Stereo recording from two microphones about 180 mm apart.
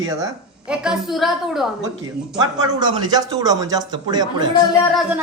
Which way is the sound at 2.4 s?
20° right (ahead or behind).